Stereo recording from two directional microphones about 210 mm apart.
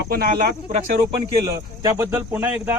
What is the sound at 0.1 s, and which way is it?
Speech, 45° right (ahead or behind).